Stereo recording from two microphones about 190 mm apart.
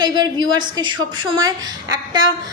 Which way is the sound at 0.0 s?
20° right (ahead or behind).